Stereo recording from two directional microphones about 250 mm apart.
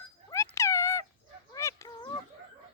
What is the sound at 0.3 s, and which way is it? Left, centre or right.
Cat, centre.